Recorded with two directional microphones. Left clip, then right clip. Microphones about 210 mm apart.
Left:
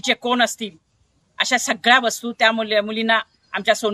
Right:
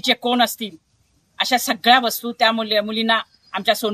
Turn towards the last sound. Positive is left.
turn(degrees=0)  # may be behind; listen again after turning